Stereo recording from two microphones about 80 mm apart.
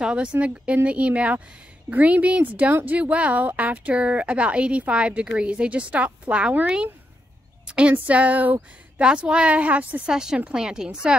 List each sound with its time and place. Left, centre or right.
0.0 s a woman's voice: centre